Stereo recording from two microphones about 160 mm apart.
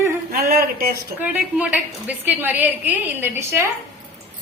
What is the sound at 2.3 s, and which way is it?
A woman's voice, 10° right (ahead or behind).